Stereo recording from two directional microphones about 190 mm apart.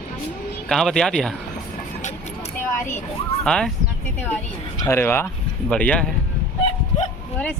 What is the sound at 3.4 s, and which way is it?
Speech, 5° left (ahead or behind).